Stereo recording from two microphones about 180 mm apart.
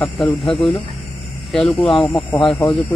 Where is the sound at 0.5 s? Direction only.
30° left (ahead or behind).